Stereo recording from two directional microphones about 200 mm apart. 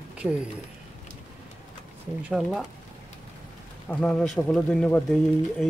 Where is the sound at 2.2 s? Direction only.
5° right (ahead or behind).